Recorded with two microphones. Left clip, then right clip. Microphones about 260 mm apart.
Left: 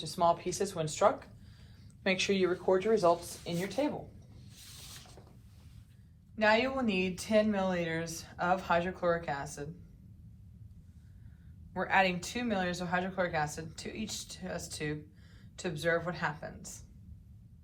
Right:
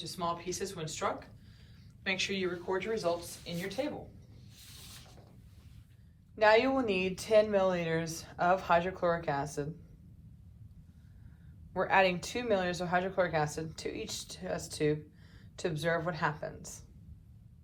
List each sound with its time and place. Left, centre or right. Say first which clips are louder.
0.0 s speech: left 7 dB; centre
6.3 s speech: right 3 dB; right
11.7 s speech: right 1 dB; centre